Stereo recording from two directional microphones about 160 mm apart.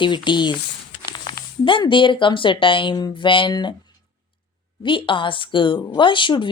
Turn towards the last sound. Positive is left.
turn(degrees=30)  # may be behind; listen again after turning